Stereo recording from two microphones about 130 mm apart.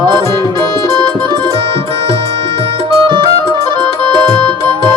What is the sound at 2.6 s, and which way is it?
Music, 45° right (ahead or behind).